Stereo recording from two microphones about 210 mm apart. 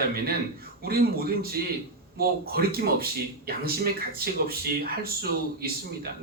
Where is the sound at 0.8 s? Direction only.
45° right (ahead or behind).